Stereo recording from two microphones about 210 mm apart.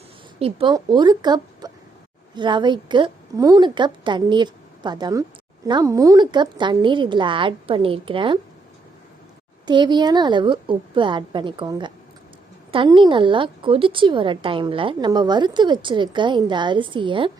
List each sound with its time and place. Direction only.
0.3 s a woman's voice: 25° right (ahead or behind)
9.6 s a woman's voice: 20° right (ahead or behind)